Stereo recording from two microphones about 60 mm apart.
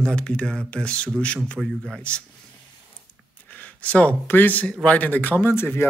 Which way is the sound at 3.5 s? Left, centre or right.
Left.